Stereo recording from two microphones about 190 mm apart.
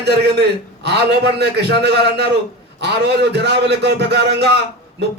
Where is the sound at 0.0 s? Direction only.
60° right (ahead or behind).